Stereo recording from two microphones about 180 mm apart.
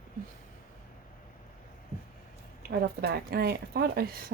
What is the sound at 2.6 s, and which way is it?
Speech, 60° right (ahead or behind).